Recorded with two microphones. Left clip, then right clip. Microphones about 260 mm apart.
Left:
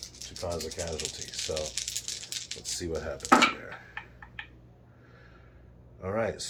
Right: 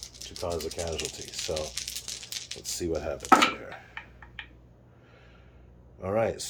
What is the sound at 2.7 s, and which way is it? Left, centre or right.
Speech, right.